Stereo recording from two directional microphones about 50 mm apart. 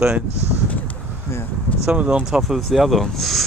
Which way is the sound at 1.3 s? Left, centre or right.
Left.